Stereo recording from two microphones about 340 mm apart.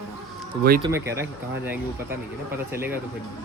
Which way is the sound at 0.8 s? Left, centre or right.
Centre.